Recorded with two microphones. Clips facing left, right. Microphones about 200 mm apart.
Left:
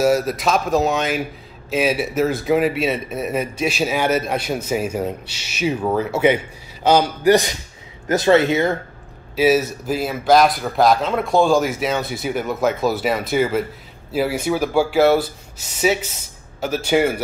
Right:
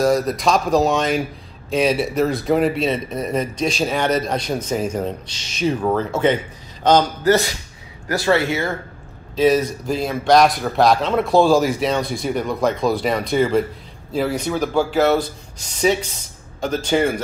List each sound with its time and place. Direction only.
0.0 s a man's voice: 5° left (ahead or behind)
9.3 s a man's voice: 5° left (ahead or behind)